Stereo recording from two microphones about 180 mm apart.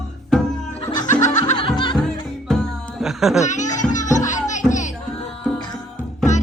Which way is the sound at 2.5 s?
Centre (ahead or behind).